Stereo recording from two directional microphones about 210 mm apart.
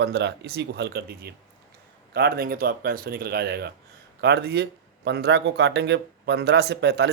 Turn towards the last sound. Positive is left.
turn(degrees=-50)  # may be behind; listen again after turning